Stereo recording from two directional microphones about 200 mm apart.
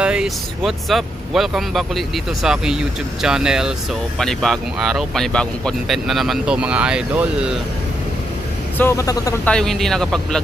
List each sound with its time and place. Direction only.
0.0 s speech: 5° right (ahead or behind)
8.7 s a man's voice: 15° left (ahead or behind)
9.5 s speech: 5° left (ahead or behind)